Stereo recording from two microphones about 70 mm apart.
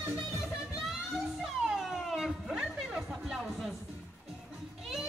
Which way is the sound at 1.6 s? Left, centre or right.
Centre.